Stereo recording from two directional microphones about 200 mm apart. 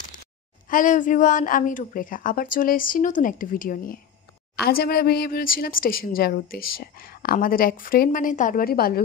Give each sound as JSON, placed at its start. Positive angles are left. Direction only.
{"t": 0.7, "sound": "a woman's voice", "side_deg": 40}